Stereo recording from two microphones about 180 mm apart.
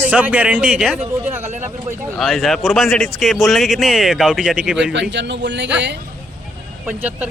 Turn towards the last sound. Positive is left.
turn(degrees=-10)  # may be behind; listen again after turning